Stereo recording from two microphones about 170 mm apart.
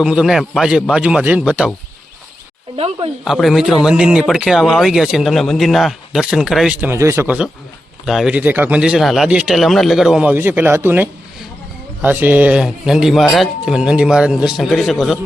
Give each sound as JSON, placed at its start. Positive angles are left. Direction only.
{"t": 0.0, "sound": "speech", "side_deg": -5}
{"t": 2.7, "sound": "speech", "side_deg": -35}
{"t": 3.2, "sound": "speech", "side_deg": 0}
{"t": 6.9, "sound": "speech", "side_deg": -15}